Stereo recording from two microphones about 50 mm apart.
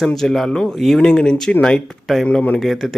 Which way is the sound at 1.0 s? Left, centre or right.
Centre.